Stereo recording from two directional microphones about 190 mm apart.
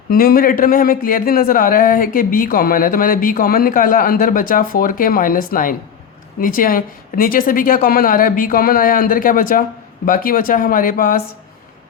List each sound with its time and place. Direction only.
0.1 s speech: 50° left (ahead or behind)